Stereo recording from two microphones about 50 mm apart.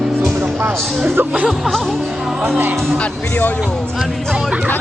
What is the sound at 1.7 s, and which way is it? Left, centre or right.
Speech, centre.